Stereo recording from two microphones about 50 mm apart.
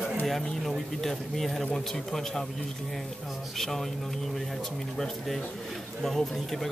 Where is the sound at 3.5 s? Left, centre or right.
Centre.